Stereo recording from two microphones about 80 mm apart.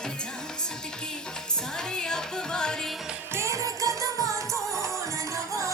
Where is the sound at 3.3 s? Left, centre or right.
Right.